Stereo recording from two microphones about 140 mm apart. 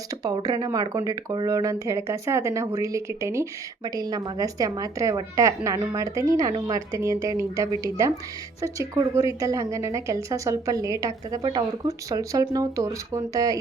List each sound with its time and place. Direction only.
0.2 s speech: 25° right (ahead or behind)